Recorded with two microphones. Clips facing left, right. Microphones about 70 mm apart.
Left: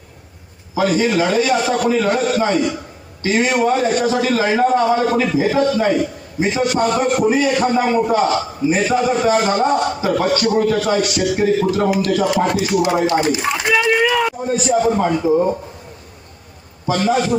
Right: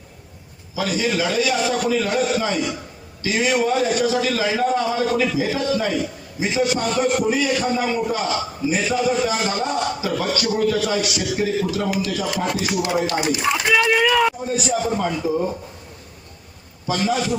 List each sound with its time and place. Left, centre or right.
0.8 s a man's voice: left
13.1 s a man's voice: left
13.9 s speech: centre
14.4 s a man's voice: left
16.8 s a man's voice: left